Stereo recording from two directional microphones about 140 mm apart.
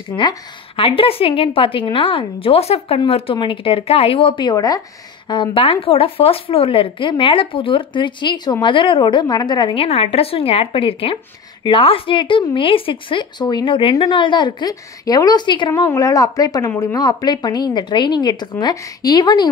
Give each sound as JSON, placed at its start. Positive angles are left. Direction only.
{"t": 0.1, "sound": "a woman's voice", "side_deg": 35}
{"t": 5.3, "sound": "a woman's voice", "side_deg": 40}
{"t": 9.8, "sound": "a woman's voice", "side_deg": 45}